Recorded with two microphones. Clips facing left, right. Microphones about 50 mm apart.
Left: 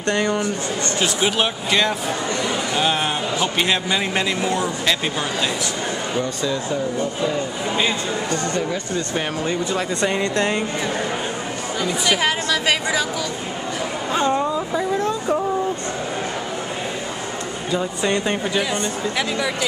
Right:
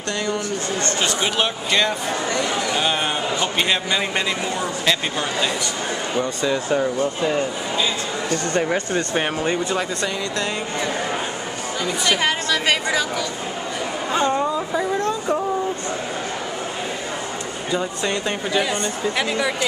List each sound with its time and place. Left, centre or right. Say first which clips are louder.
0.1 s speech: left 4 dB; left
1.0 s a man's voice: left 3 dB; centre
7.7 s a man's voice: left 4 dB; left
8.5 s speech: right 3 dB; right
9.1 s speech: right 1 dB; right
10.0 s a man's voice: left 4 dB; left
11.8 s a man's voice: left 1 dB; centre
14.1 s speech: even; centre
15.0 s a sound: left 1 dB; centre
18.2 s a man's voice: even; centre